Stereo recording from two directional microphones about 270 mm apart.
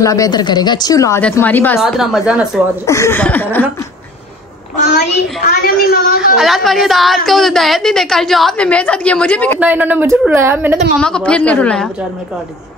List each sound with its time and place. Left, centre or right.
0.0 s a woman's voice: centre
2.9 s a woman's voice: centre
5.6 s a woman's voice: left
6.3 s a woman's voice: centre
9.6 s a woman's voice: centre
11.0 s a woman's voice: centre